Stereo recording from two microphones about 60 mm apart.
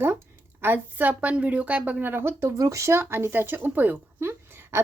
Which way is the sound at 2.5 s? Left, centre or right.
Right.